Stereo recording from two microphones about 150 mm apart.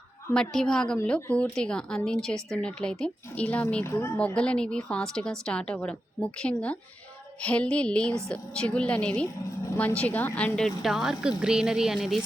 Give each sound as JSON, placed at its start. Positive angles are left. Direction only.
{"t": 0.3, "sound": "a woman's voice", "side_deg": 5}
{"t": 4.4, "sound": "a woman's voice", "side_deg": 5}